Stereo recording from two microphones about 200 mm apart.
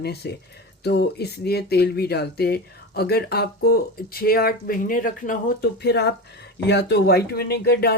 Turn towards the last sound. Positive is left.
turn(degrees=55)  # may be behind; listen again after turning